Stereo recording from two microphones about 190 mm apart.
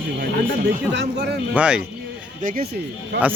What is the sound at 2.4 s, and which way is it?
Speech, 45° right (ahead or behind).